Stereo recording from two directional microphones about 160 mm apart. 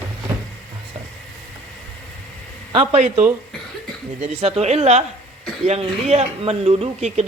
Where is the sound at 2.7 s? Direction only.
45° right (ahead or behind).